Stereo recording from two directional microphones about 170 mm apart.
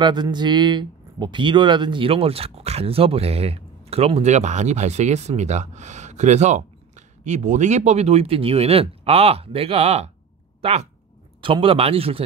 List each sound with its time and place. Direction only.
0.0 s speech: 25° right (ahead or behind)